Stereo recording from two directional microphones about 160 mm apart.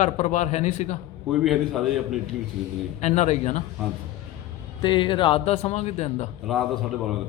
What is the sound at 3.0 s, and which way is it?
Speech, 45° left (ahead or behind).